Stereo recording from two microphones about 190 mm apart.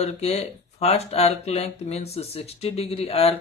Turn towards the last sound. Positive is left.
turn(degrees=30)  # may be behind; listen again after turning